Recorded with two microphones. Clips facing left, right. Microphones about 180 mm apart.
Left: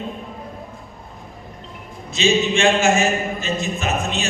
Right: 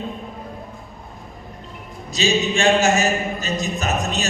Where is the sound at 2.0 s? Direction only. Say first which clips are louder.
Left 2 dB; 40° right (ahead or behind).